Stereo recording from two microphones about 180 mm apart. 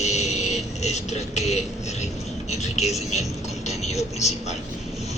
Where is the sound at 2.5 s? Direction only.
40° left (ahead or behind).